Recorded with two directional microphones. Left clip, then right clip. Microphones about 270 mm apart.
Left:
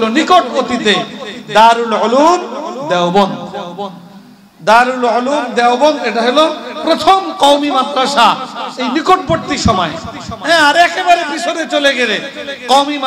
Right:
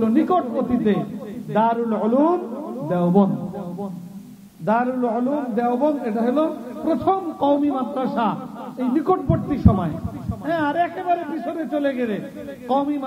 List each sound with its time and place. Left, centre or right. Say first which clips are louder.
0.0 s a man's voice: left 10 dB; centre
4.6 s a man's voice: left 12 dB; centre